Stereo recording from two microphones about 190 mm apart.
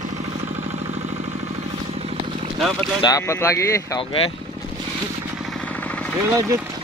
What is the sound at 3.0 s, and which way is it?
Speech, 15° left (ahead or behind).